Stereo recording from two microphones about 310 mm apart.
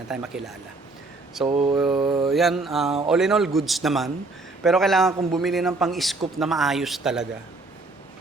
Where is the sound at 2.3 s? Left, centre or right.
Centre.